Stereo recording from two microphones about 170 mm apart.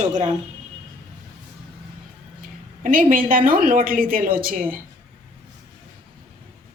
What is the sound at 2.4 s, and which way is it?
A woman's voice, 55° right (ahead or behind).